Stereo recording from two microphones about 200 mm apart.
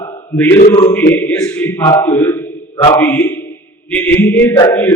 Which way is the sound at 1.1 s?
10° left (ahead or behind).